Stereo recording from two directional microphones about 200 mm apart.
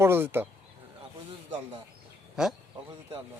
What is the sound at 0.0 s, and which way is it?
Speech, 10° right (ahead or behind).